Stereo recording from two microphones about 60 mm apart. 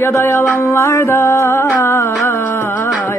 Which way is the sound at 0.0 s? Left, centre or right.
Left.